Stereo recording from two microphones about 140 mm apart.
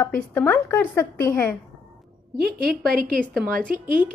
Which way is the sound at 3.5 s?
75° right (ahead or behind).